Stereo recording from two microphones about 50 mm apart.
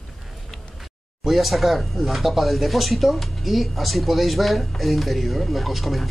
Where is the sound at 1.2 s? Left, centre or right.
Centre.